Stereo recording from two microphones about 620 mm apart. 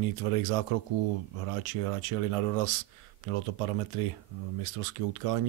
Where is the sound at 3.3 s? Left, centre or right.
Right.